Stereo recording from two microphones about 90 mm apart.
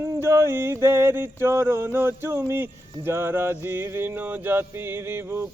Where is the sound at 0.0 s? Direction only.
30° right (ahead or behind).